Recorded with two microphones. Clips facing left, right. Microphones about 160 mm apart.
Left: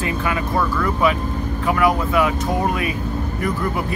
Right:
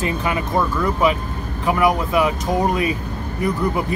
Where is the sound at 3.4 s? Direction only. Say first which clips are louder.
Right 3 dB; 20° right (ahead or behind).